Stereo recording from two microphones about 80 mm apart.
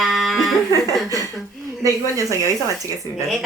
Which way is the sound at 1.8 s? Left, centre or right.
Right.